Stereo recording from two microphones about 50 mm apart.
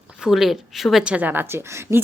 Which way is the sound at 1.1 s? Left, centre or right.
Right.